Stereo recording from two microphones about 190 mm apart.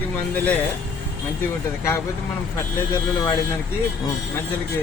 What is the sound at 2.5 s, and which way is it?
Speech, 15° left (ahead or behind).